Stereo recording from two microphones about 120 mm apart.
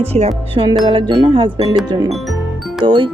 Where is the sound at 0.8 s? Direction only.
35° right (ahead or behind).